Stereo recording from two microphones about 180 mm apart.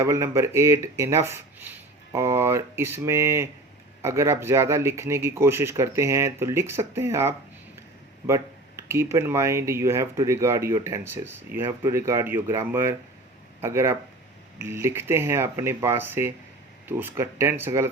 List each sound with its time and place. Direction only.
0.0 s speech: 15° right (ahead or behind)
8.9 s speech: 15° right (ahead or behind)